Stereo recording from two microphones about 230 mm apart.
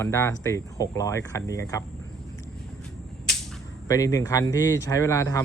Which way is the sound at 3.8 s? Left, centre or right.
Centre.